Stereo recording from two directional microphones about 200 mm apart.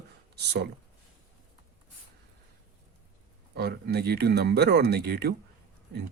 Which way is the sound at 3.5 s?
55° right (ahead or behind).